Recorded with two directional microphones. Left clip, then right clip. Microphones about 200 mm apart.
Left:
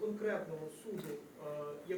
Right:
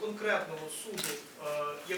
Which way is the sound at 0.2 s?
10° left (ahead or behind).